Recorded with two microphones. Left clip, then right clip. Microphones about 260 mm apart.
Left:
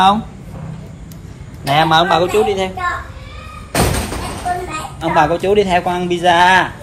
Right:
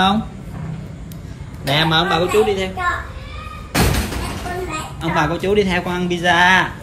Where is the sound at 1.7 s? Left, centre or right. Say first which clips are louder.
Left 5 dB; centre.